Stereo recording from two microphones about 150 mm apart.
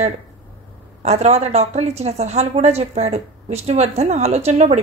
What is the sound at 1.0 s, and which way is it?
A woman's voice, 45° right (ahead or behind).